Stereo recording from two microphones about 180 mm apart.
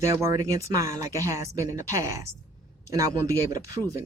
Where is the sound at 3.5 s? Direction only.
20° right (ahead or behind).